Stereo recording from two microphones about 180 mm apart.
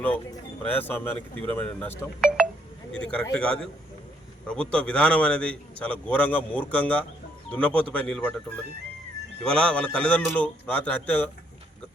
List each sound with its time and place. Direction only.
0.7 s a man's voice: 10° left (ahead or behind)
9.4 s a man's voice: 5° left (ahead or behind)